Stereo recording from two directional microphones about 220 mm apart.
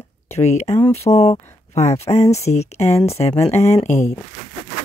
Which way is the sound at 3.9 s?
30° left (ahead or behind).